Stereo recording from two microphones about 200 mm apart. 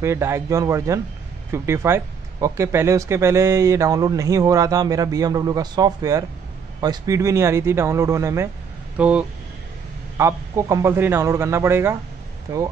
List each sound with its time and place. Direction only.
0.0 s a man's voice: 15° right (ahead or behind)